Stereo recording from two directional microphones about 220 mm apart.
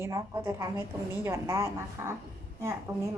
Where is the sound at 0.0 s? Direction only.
15° right (ahead or behind).